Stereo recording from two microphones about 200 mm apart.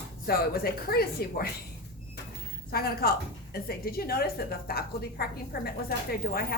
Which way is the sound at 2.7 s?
50° left (ahead or behind).